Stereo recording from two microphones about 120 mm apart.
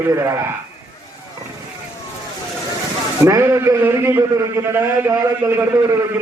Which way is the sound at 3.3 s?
25° right (ahead or behind).